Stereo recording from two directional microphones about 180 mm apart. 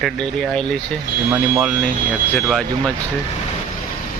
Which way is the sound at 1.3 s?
10° right (ahead or behind).